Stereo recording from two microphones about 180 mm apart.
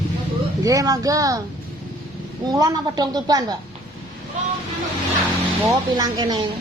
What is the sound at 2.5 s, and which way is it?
Speech, 20° right (ahead or behind).